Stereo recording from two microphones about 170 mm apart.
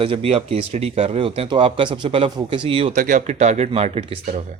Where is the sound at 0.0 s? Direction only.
35° right (ahead or behind).